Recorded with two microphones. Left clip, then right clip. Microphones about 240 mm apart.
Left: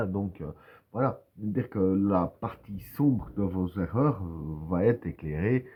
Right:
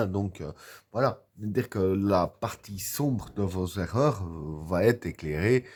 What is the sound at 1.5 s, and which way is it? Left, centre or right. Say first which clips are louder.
Speech: right 1 dB; right.